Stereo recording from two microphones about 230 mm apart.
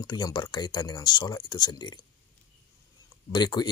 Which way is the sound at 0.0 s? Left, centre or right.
Centre.